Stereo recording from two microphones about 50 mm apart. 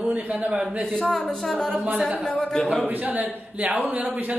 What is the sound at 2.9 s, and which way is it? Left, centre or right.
A man's voice, right.